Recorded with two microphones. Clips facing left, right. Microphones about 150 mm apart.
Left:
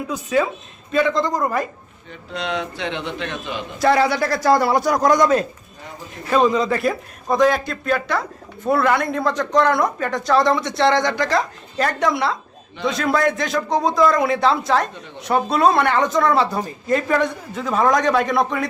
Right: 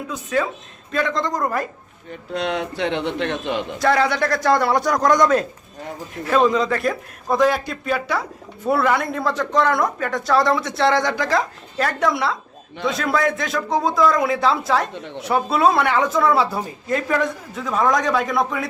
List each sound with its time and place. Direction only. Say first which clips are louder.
0.1 s a man's voice: left 2 dB; 10° left (ahead or behind)
2.0 s a man's voice: right 3 dB; 50° right (ahead or behind)
3.8 s a man's voice: left 3 dB; 5° left (ahead or behind)